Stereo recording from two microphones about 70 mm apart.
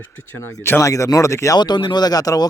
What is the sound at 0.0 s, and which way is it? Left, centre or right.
A man's voice, left.